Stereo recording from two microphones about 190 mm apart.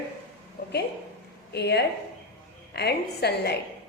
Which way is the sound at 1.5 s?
60° left (ahead or behind).